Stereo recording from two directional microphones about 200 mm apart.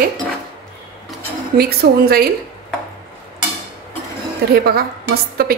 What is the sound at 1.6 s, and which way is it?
Speech, 50° right (ahead or behind).